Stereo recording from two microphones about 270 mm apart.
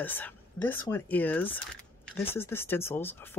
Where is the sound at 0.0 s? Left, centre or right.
Centre.